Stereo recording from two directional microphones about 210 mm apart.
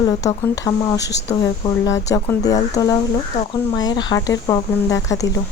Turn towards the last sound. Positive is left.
turn(degrees=15)  # may be behind; listen again after turning